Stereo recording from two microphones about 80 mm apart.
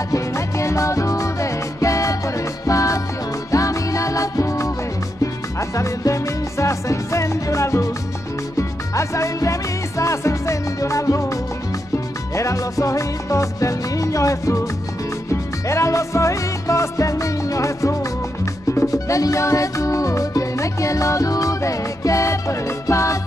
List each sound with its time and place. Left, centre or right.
0.1 s music: left
12.4 s music: left
15.7 s music: left